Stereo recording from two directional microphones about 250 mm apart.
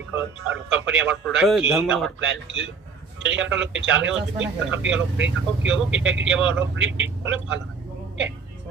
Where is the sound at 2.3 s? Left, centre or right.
Right.